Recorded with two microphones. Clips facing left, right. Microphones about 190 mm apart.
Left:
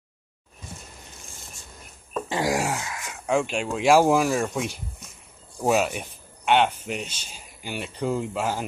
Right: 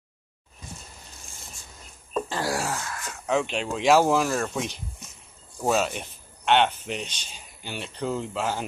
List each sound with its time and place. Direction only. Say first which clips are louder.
2.2 s speech: left 7 dB; 15° left (ahead or behind)